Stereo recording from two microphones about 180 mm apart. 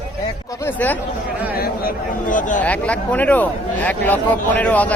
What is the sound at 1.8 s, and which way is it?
Speech, 45° left (ahead or behind).